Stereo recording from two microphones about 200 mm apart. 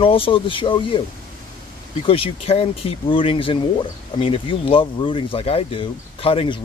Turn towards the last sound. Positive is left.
turn(degrees=25)  # may be behind; listen again after turning